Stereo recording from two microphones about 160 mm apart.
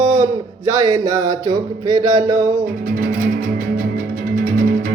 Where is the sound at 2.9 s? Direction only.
70° right (ahead or behind).